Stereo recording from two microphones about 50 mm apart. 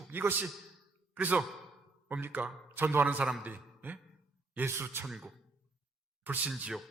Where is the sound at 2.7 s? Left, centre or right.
Right.